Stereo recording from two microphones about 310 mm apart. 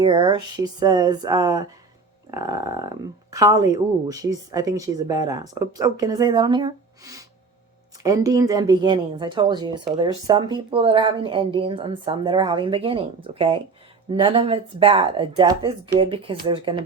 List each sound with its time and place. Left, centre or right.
0.0 s speech: centre